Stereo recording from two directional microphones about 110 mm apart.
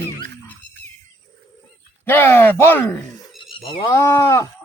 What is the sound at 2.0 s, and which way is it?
Speech, 20° left (ahead or behind).